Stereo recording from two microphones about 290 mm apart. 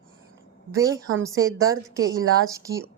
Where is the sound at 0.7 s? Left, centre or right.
Centre.